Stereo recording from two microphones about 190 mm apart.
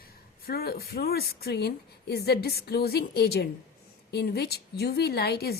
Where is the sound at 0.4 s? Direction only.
55° left (ahead or behind).